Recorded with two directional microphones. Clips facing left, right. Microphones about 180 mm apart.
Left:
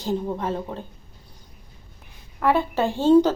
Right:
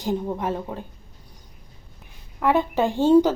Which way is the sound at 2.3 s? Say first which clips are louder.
Right 1 dB; 15° right (ahead or behind).